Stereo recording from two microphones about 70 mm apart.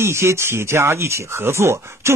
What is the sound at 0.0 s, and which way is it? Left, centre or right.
Speech, right.